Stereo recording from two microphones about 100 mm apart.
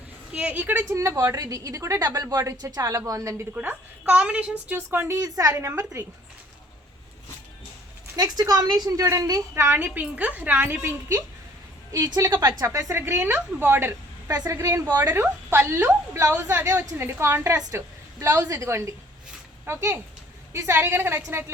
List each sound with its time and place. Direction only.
0.3 s a woman's voice: 15° right (ahead or behind)
0.9 s a woman's voice: 35° right (ahead or behind)
3.5 s a woman's voice: 15° right (ahead or behind)
8.1 s a woman's voice: 40° right (ahead or behind)
9.6 s a woman's voice: 20° right (ahead or behind)
11.9 s a woman's voice: 40° right (ahead or behind); by 13.9 s 20° right (ahead or behind)
14.3 s a woman's voice: 35° right (ahead or behind)
15.0 s a woman's voice: 25° right (ahead or behind)
17.7 s a sound: 25° right (ahead or behind)
18.3 s a woman's voice: 35° right (ahead or behind)